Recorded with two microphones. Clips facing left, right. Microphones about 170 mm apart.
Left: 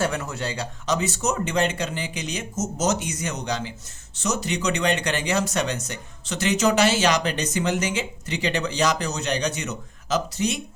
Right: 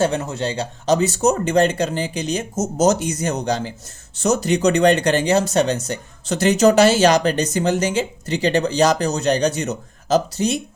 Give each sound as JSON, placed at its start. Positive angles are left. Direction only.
{"t": 0.0, "sound": "speech", "side_deg": -25}